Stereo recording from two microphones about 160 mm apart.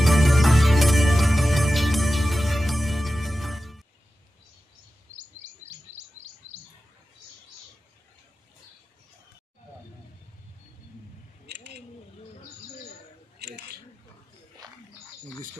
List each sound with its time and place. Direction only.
0.0 s music: centre (ahead or behind)
5.1 s chirp: 45° right (ahead or behind)
11.4 s a sound: 90° right
13.4 s scissors: 90° right
14.6 s bird: 25° right (ahead or behind)